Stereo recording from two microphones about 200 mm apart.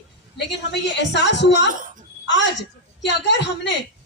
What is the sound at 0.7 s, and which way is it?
A woman's voice, 60° left (ahead or behind).